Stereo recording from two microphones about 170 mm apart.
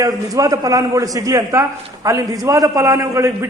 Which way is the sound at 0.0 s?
20° right (ahead or behind).